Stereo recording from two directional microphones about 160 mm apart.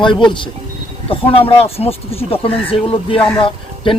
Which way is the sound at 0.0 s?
30° left (ahead or behind).